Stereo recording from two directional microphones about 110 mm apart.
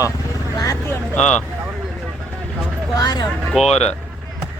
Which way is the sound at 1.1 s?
10° left (ahead or behind).